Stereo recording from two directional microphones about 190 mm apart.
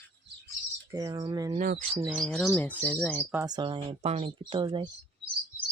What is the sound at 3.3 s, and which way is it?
Speech, 20° right (ahead or behind).